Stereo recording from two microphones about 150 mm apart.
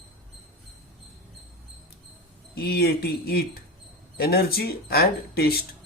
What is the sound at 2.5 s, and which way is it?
Speech, 90° left.